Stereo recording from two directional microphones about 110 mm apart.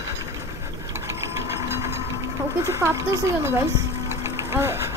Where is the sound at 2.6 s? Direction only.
25° right (ahead or behind).